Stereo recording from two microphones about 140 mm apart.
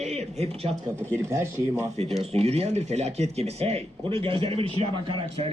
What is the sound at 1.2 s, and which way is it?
Speech, 20° right (ahead or behind).